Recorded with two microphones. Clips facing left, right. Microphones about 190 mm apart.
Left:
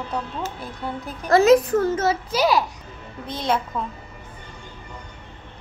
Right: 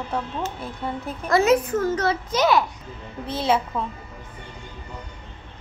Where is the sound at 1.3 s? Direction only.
35° left (ahead or behind).